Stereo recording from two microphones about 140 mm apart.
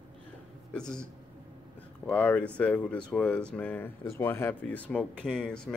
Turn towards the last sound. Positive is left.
turn(degrees=5)  # may be behind; listen again after turning